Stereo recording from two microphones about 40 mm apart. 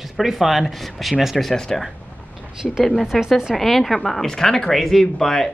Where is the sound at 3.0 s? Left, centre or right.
Centre.